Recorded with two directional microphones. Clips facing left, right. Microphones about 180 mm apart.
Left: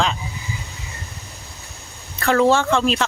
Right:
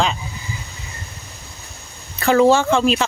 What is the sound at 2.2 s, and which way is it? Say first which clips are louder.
Speech: right 3 dB; 5° right (ahead or behind).